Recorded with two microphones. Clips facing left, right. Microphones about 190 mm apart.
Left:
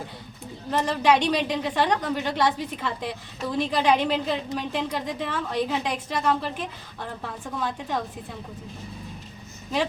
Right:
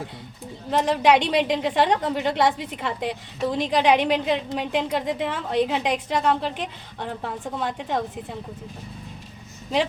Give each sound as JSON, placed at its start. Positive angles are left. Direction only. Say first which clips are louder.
{"t": 0.7, "sound": "a woman's voice", "louder": "right 3 dB", "side_deg": -20}